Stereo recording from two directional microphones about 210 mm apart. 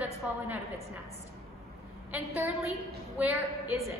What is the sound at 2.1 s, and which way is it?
A woman's voice, 5° right (ahead or behind).